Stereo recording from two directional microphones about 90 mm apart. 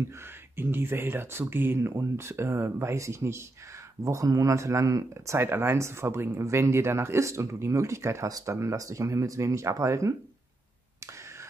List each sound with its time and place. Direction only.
0.6 s speech: 25° right (ahead or behind)